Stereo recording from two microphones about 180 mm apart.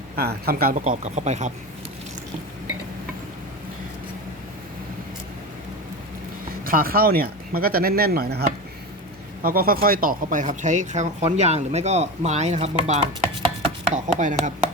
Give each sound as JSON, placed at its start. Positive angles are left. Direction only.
{"t": 0.2, "sound": "speech", "side_deg": -60}
{"t": 6.7, "sound": "speech", "side_deg": -55}